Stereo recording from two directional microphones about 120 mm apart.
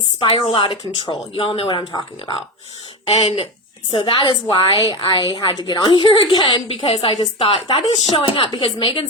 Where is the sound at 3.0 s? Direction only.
50° left (ahead or behind).